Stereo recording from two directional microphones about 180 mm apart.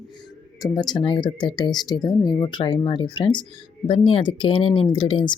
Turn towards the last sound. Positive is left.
turn(degrees=25)  # may be behind; listen again after turning